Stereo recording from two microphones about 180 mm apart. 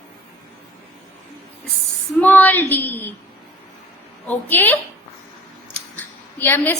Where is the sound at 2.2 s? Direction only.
10° left (ahead or behind).